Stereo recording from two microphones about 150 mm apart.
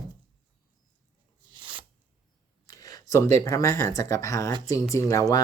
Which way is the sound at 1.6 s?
30° right (ahead or behind).